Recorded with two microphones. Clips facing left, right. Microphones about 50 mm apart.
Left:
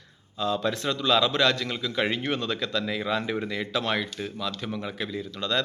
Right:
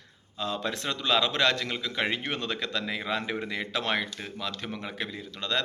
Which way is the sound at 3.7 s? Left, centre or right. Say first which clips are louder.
Left 1 dB; right.